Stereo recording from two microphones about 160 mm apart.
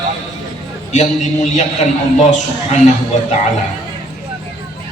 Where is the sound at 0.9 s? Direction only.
50° left (ahead or behind).